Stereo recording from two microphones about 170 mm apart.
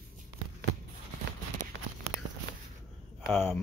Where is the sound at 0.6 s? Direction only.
75° right (ahead or behind).